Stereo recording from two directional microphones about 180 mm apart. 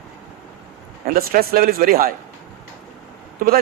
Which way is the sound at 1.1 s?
55° right (ahead or behind).